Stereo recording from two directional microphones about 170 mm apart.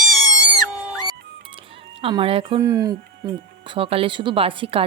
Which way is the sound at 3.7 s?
35° right (ahead or behind).